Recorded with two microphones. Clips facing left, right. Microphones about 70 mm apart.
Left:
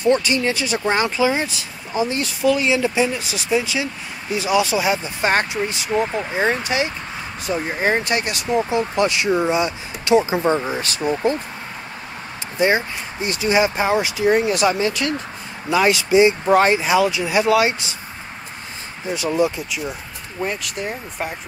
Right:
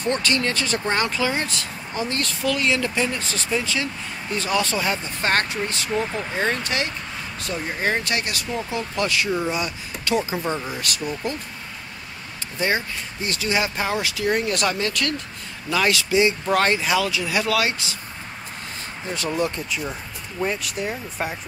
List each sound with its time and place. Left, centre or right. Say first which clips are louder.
0.0 s speech: left 5 dB; centre
12.5 s speech: left 5 dB; left
19.0 s speech: left 5 dB; centre